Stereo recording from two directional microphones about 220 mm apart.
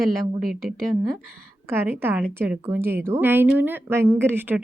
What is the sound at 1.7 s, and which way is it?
Speech, 10° right (ahead or behind).